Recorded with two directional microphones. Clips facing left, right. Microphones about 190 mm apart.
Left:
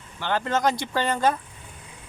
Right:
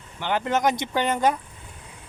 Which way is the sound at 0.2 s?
15° right (ahead or behind).